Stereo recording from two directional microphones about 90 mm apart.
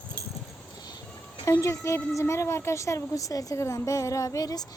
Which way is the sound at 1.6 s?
35° left (ahead or behind).